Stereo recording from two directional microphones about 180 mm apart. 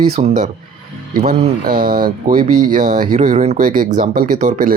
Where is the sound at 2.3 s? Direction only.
40° right (ahead or behind).